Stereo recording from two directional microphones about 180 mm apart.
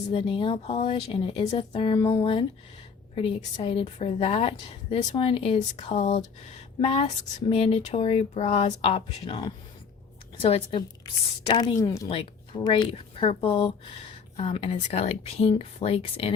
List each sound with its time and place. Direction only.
0.1 s a woman's voice: 30° left (ahead or behind)
12.1 s a woman's voice: 30° left (ahead or behind)